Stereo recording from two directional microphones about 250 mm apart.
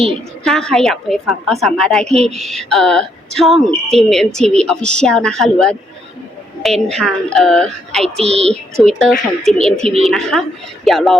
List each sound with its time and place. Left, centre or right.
0.4 s speech: centre
6.9 s speech: centre
8.2 s a woman's voice: right
8.8 s speech: centre